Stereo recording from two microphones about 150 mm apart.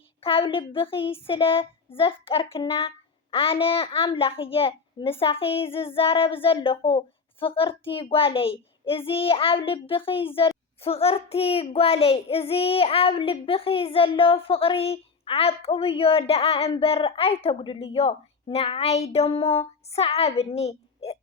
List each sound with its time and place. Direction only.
0.2 s child singing: 35° left (ahead or behind)